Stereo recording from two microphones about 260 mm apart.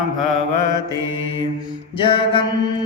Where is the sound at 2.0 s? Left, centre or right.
Centre.